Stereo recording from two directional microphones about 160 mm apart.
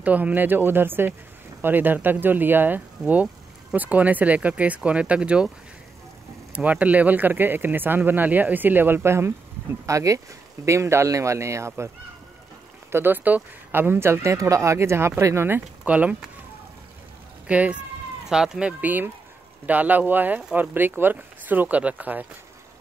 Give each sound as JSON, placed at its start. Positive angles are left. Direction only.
{"t": 0.0, "sound": "speech", "side_deg": -10}
{"t": 6.5, "sound": "speech", "side_deg": -10}
{"t": 12.9, "sound": "speech", "side_deg": -10}
{"t": 17.5, "sound": "speech", "side_deg": -10}